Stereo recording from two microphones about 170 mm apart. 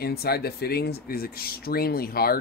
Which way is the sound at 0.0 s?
65° left (ahead or behind).